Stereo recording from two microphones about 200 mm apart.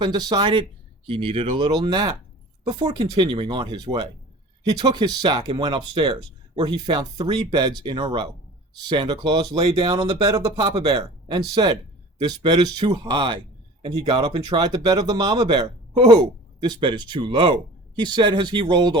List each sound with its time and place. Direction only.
0.0 s speech: 20° right (ahead or behind)
4.8 s speech: 20° right (ahead or behind)